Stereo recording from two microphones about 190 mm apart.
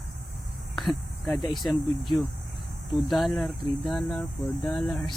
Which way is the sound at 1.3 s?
20° left (ahead or behind).